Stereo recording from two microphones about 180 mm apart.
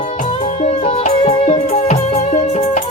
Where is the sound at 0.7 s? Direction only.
35° left (ahead or behind).